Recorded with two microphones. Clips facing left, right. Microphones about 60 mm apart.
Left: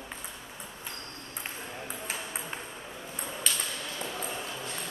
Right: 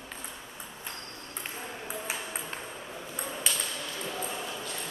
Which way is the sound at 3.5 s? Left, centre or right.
Centre.